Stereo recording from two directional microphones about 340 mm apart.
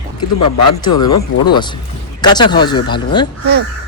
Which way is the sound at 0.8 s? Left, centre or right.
Centre.